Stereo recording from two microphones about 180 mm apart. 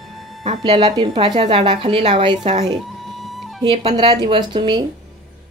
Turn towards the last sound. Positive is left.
turn(degrees=-25)  # may be behind; listen again after turning